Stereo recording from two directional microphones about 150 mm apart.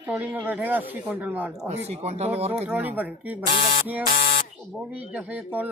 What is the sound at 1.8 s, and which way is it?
Speech, 45° right (ahead or behind).